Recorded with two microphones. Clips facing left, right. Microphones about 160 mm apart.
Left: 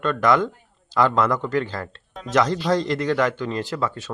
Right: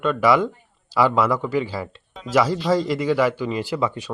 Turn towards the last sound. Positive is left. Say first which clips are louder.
# right 2 dB
turn(degrees=-15)  # may be behind; listen again after turning